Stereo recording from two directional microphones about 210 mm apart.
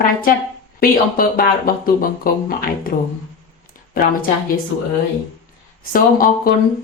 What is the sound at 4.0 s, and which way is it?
Speech, 45° left (ahead or behind).